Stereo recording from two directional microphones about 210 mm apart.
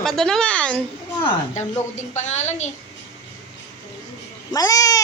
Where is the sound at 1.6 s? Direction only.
35° left (ahead or behind).